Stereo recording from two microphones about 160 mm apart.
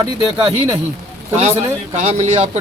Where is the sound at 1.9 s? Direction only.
45° right (ahead or behind).